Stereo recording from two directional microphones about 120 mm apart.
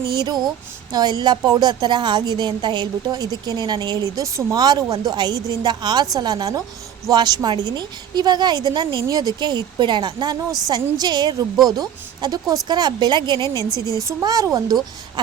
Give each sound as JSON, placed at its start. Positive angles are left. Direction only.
{"t": 0.1, "sound": "a woman's voice", "side_deg": -35}